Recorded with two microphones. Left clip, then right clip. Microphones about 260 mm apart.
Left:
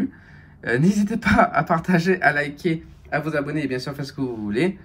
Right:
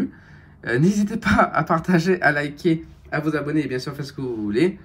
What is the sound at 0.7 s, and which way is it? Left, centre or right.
Speech, centre.